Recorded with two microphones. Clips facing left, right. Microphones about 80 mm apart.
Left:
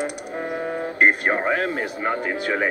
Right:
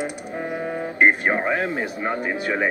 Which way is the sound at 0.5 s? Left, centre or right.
Centre.